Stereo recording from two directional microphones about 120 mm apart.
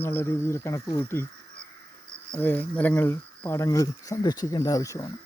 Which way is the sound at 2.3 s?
15° left (ahead or behind).